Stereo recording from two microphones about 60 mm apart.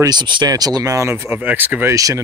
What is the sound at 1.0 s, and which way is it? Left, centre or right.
Speech, right.